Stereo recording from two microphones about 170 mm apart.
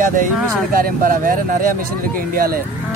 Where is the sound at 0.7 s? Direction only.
55° right (ahead or behind).